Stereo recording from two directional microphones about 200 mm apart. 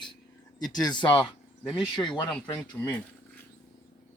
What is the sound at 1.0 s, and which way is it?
Speech, 5° left (ahead or behind).